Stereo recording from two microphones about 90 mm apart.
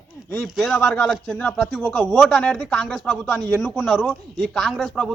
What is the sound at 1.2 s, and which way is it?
Speech, 15° left (ahead or behind).